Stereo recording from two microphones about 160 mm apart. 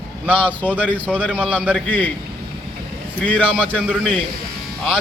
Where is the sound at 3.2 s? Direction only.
10° left (ahead or behind).